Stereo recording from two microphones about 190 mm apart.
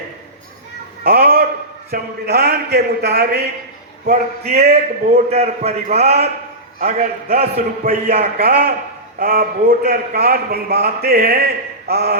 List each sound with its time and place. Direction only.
1.0 s a sound: 55° right (ahead or behind)
1.9 s a man's voice: 55° right (ahead or behind)
4.0 s a man's voice: 35° right (ahead or behind)
8.0 s a man's voice: 55° right (ahead or behind)